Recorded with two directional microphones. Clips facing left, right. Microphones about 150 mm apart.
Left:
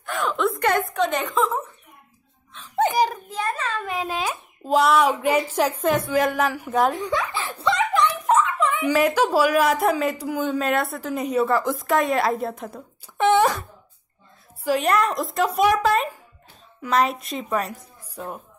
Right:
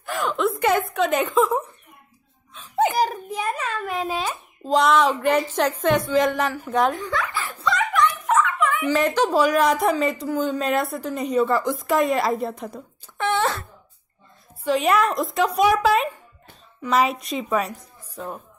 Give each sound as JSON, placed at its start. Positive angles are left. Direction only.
{"t": 0.0, "sound": "a woman's voice", "side_deg": 0}
{"t": 2.5, "sound": "a sound", "side_deg": -5}
{"t": 3.9, "sound": "a child's voice", "side_deg": 0}
{"t": 7.0, "sound": "a sound", "side_deg": 20}
{"t": 8.8, "sound": "speech", "side_deg": 10}
{"t": 13.2, "sound": "wail", "side_deg": 15}
{"t": 14.6, "sound": "speech", "side_deg": 5}
{"t": 18.1, "sound": "speech", "side_deg": 10}